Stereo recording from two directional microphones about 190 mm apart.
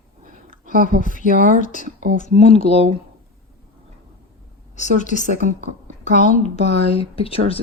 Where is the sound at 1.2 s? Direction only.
45° right (ahead or behind).